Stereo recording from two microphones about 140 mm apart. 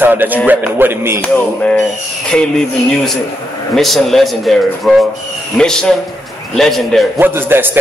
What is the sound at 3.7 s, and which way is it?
A man's voice, centre (ahead or behind).